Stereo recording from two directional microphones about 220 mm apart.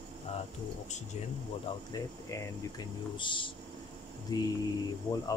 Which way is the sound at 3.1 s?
20° left (ahead or behind).